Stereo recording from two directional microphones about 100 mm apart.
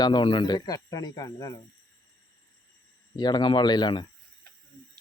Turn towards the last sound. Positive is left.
turn(degrees=45)  # may be behind; listen again after turning